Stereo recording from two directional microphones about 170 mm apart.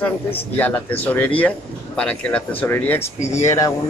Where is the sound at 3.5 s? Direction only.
20° left (ahead or behind).